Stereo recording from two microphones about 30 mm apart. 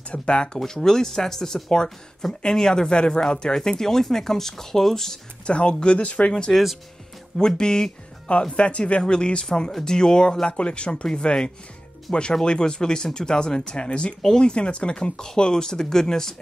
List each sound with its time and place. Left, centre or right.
0.1 s speech: left
0.7 s speech: centre
2.7 s speech: left
5.5 s speech: left
7.3 s speech: left
8.5 s speech: left
9.7 s speech: centre; by 15.1 s left
15.1 s speech: left